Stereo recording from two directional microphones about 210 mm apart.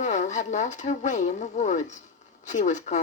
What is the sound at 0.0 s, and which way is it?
Speech, 35° left (ahead or behind).